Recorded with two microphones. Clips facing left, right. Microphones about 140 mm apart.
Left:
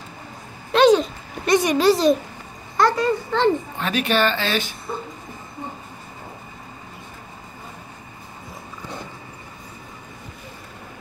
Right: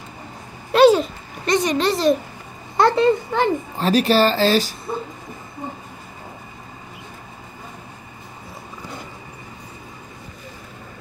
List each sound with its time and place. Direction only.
0.7 s speech: 5° right (ahead or behind)
1.4 s speech: 10° left (ahead or behind)
2.8 s a child's voice: 20° right (ahead or behind)
3.7 s speech: 35° right (ahead or behind)